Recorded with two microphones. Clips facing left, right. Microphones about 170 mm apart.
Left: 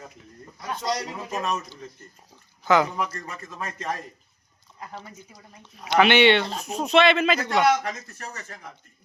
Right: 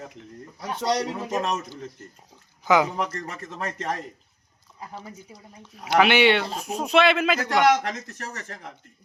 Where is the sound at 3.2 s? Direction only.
70° right (ahead or behind).